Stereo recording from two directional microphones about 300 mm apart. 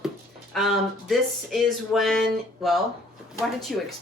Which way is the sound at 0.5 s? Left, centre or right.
Centre.